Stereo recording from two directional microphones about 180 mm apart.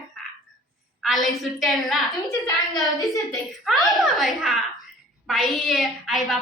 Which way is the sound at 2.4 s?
20° left (ahead or behind).